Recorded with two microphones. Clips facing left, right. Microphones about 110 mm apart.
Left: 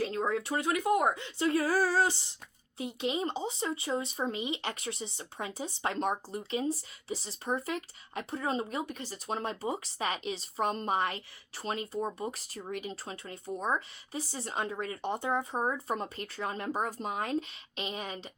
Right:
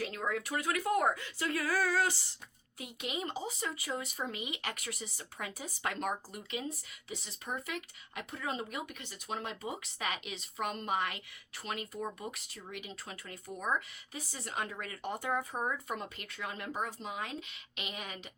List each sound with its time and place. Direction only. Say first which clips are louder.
0.0 s speech: left 5 dB; 30° left (ahead or behind)
17.7 s speech: left 6 dB; 30° left (ahead or behind)